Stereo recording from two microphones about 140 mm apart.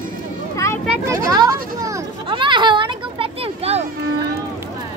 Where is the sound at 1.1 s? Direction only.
25° right (ahead or behind).